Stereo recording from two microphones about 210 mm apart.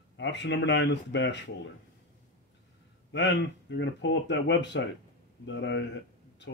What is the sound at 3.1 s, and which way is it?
Speech, 55° left (ahead or behind).